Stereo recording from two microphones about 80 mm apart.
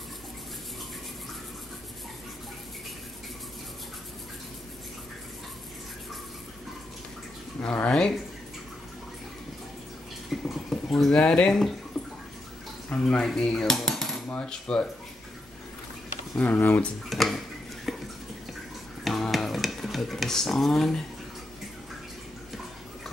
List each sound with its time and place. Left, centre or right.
7.6 s a sound: centre
7.9 s cutlery: centre
10.3 s boiling: centre
11.9 s a sound: centre
12.9 s cutlery: centre
16.3 s speech: centre
17.1 s a sound: centre
17.9 s water tap: centre
19.0 s stir: centre